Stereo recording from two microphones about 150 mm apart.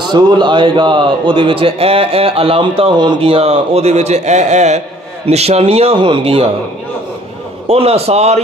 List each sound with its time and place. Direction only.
0.0 s a man's voice: 30° right (ahead or behind)
7.6 s a man's voice: 40° right (ahead or behind)